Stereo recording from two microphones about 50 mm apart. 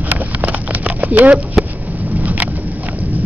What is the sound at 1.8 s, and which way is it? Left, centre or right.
Vehicle, right.